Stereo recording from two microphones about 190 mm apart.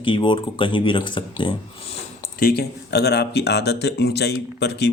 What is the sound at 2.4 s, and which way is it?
Speech, 55° left (ahead or behind).